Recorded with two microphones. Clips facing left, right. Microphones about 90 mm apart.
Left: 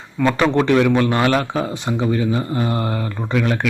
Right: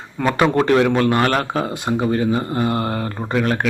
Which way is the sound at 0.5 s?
40° right (ahead or behind).